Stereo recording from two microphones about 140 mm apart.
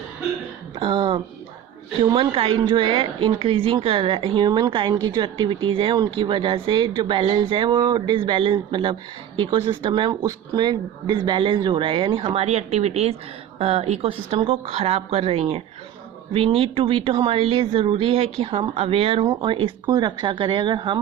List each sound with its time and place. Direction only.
0.8 s speech: 35° right (ahead or behind)